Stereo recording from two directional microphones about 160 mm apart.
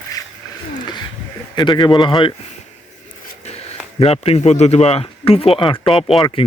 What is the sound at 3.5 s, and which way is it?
Speech, 40° left (ahead or behind).